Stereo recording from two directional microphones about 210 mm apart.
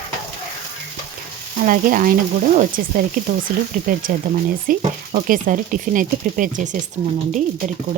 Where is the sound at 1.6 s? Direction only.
40° right (ahead or behind).